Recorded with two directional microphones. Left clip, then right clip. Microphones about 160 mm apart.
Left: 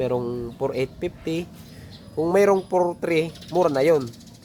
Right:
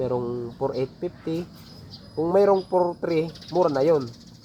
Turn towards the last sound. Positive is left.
turn(degrees=20)  # may be behind; listen again after turning